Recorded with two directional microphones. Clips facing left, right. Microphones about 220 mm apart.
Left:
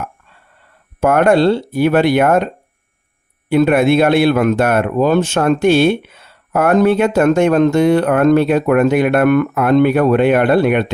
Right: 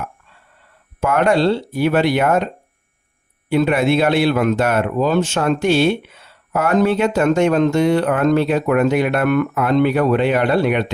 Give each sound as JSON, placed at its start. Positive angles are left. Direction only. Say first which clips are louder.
{"t": 1.0, "sound": "speech", "louder": "left 4 dB", "side_deg": 50}
{"t": 3.5, "sound": "speech", "louder": "left 4 dB", "side_deg": 55}